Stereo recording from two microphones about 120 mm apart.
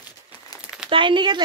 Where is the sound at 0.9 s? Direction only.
45° right (ahead or behind).